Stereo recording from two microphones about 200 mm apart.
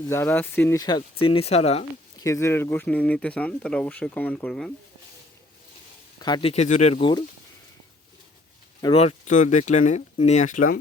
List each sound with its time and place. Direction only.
0.1 s speech: 10° left (ahead or behind); by 1.8 s 30° left (ahead or behind)
2.1 s speech: 15° left (ahead or behind)
6.1 s speech: 20° left (ahead or behind)
8.8 s speech: 30° left (ahead or behind)